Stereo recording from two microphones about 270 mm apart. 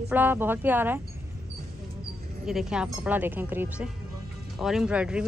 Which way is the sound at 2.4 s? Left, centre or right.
Centre.